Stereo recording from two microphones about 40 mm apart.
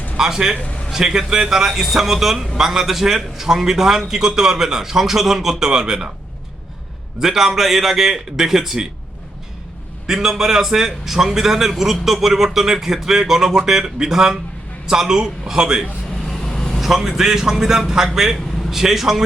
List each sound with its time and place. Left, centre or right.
0.2 s a man's voice: centre
7.2 s a man's voice: centre
10.1 s a man's voice: centre
16.5 s a sound: centre
16.8 s a man's voice: centre